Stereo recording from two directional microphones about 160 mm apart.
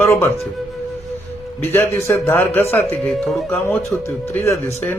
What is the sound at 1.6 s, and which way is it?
A man's voice, 15° left (ahead or behind).